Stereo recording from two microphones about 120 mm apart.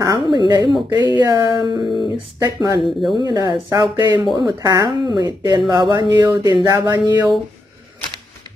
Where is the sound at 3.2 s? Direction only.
35° right (ahead or behind).